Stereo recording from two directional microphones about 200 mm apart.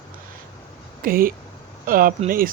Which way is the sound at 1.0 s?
45° right (ahead or behind).